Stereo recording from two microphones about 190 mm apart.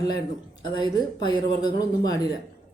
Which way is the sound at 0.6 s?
25° left (ahead or behind).